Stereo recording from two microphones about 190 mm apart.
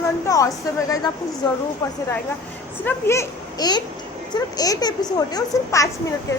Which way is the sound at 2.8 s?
10° left (ahead or behind).